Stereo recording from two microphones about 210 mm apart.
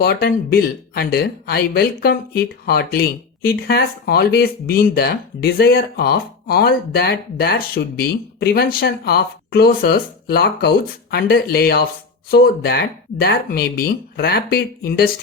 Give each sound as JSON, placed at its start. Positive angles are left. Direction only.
{"t": 0.0, "sound": "speech", "side_deg": 45}